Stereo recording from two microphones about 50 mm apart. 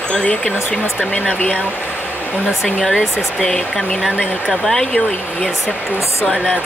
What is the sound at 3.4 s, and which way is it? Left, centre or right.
Speech, centre.